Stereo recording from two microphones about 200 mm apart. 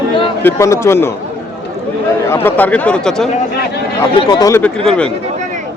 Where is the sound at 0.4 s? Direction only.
15° left (ahead or behind).